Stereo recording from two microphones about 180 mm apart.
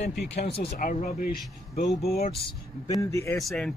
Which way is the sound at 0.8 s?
55° left (ahead or behind).